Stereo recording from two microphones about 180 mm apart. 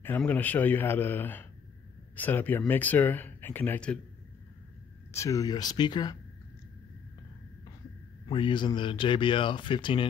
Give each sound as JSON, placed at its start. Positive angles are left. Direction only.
{"t": 0.0, "sound": "speech", "side_deg": 10}
{"t": 5.1, "sound": "speech", "side_deg": 20}
{"t": 8.3, "sound": "speech", "side_deg": 25}